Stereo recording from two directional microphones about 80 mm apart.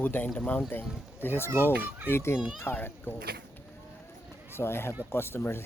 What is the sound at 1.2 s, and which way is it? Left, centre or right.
Speech, left.